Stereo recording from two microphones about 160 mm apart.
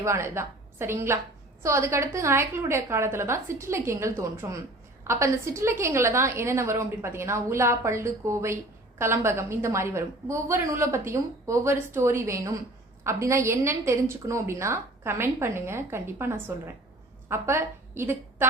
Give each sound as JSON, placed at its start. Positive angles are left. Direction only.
{"t": 0.0, "sound": "a woman's voice", "side_deg": -15}